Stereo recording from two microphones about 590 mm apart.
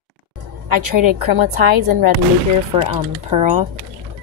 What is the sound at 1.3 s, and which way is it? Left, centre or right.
Speech, right.